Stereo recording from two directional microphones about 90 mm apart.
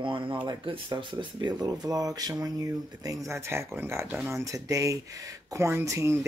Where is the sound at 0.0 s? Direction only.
70° right (ahead or behind).